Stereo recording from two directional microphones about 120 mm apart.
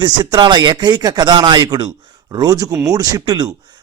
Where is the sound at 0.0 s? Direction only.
35° right (ahead or behind).